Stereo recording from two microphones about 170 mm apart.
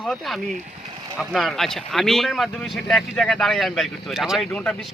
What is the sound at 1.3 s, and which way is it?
Speech, centre (ahead or behind).